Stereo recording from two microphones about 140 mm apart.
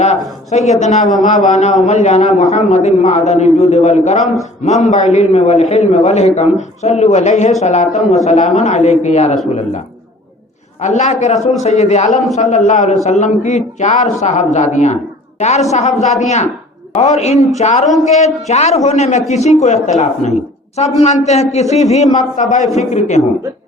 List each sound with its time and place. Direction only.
0.5 s a man's voice: 55° left (ahead or behind)
1.2 s a man's voice: 65° left (ahead or behind)
10.8 s a man's voice: 55° left (ahead or behind)